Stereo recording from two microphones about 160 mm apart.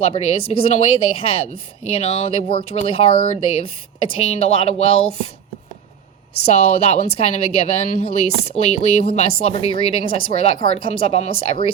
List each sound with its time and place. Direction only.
0.0 s speech: 35° left (ahead or behind)
6.4 s speech: 40° left (ahead or behind)